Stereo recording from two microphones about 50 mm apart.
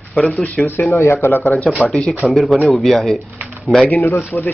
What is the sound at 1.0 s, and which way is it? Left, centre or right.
Speech, left.